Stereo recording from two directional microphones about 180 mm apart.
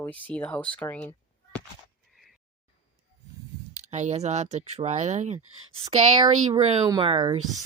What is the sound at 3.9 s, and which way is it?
Speech, 40° right (ahead or behind).